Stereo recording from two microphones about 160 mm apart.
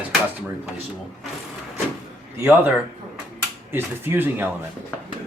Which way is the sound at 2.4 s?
10° right (ahead or behind).